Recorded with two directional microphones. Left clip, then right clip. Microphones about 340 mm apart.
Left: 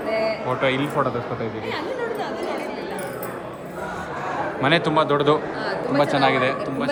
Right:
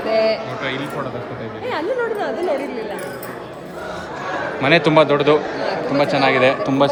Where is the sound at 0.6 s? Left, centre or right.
Centre.